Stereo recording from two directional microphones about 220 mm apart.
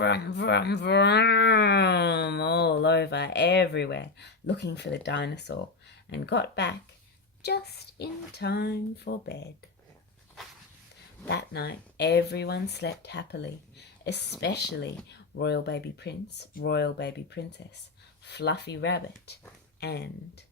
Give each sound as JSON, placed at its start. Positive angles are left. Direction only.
{"t": 0.0, "sound": "speech", "side_deg": 50}
{"t": 11.3, "sound": "speech", "side_deg": 50}